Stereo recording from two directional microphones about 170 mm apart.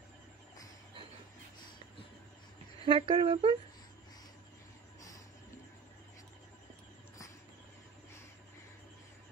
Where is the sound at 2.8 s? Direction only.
30° right (ahead or behind).